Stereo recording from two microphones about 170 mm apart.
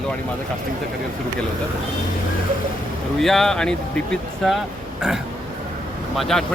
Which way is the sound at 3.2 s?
Centre (ahead or behind).